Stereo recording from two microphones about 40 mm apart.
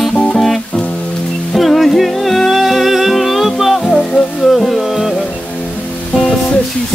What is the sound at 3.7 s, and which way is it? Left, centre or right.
Music, centre.